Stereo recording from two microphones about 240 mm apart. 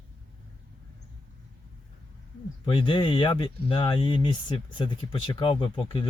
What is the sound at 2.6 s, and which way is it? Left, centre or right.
Speech, left.